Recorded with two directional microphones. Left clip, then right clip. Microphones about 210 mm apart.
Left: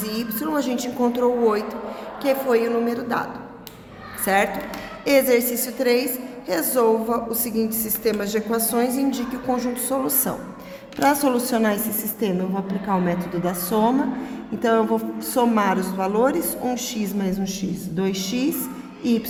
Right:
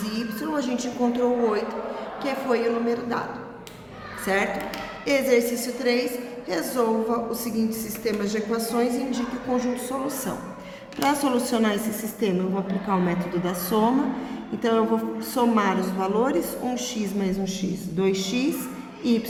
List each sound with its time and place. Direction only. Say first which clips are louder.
0.0 s a woman's voice: left 3 dB; 55° left (ahead or behind)
4.3 s a woman's voice: left 4 dB; 55° left (ahead or behind)
11.0 s a woman's voice: left 4 dB; 40° left (ahead or behind)